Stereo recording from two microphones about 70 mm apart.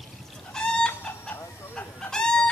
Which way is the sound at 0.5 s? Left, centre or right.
Centre.